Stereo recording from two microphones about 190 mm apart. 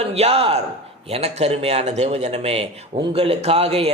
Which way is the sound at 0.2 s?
30° right (ahead or behind).